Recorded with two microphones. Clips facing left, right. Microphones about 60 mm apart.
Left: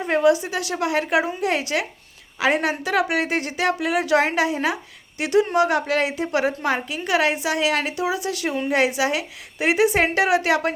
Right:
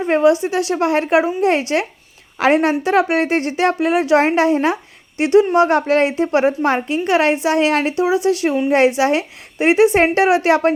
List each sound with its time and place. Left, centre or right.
0.0 s a sound: right
0.4 s a woman's voice: right
6.2 s a woman's voice: right